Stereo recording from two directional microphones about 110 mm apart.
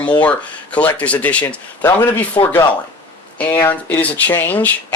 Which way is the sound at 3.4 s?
15° left (ahead or behind).